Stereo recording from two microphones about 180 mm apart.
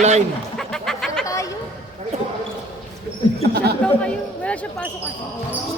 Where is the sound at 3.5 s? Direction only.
60° right (ahead or behind).